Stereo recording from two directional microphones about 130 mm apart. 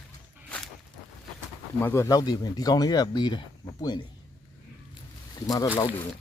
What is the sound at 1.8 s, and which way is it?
Speech, 20° left (ahead or behind).